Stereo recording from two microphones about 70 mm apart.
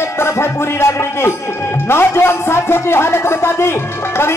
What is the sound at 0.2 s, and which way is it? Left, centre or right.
Music, left.